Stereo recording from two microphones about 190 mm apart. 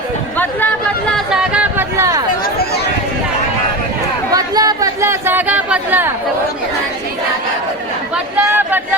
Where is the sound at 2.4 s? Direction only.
55° left (ahead or behind).